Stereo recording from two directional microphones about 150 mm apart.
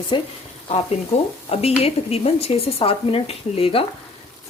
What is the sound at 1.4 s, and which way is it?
A woman's voice, 40° left (ahead or behind).